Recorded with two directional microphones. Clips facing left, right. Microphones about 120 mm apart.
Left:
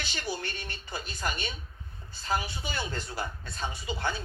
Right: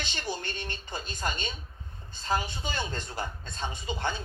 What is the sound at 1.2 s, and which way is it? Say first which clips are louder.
Speech: even; 20° right (ahead or behind).